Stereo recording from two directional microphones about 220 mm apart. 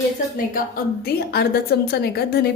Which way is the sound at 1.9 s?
45° left (ahead or behind).